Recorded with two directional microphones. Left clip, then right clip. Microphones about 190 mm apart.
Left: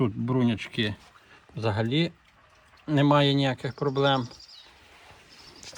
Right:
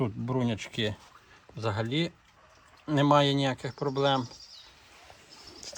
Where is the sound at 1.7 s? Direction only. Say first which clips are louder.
Left 4 dB; 15° left (ahead or behind).